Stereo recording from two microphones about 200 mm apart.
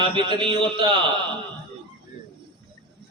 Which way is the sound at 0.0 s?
25° right (ahead or behind).